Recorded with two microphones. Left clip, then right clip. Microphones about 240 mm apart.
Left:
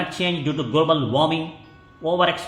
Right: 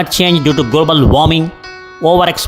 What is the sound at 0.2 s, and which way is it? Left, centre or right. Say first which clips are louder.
A man's voice: right 14 dB; right.